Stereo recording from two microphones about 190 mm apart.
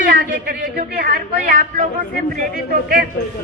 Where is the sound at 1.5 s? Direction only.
50° right (ahead or behind).